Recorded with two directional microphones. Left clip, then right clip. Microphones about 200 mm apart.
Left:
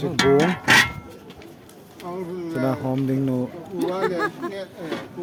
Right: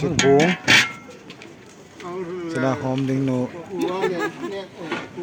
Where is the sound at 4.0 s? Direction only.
30° right (ahead or behind).